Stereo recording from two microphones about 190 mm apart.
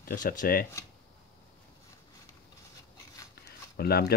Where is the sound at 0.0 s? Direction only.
45° left (ahead or behind).